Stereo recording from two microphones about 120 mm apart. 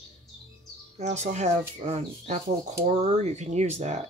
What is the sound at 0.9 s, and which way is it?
Speech, 75° right (ahead or behind).